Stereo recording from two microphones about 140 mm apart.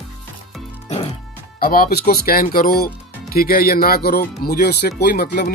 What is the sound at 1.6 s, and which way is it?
Speech, 90° left.